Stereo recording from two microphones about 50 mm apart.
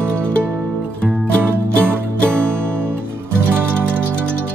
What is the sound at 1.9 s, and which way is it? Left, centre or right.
Music, right.